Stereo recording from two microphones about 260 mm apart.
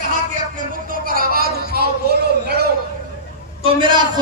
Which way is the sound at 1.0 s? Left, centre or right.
Right.